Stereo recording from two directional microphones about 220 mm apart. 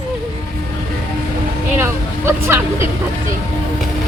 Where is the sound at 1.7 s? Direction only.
10° right (ahead or behind).